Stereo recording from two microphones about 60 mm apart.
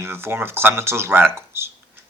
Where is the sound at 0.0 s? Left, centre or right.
Right.